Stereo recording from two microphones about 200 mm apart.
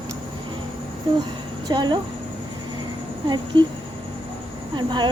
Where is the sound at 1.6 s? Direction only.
20° right (ahead or behind).